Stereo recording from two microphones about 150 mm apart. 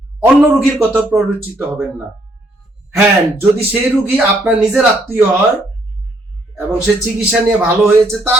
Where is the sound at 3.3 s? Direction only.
10° right (ahead or behind).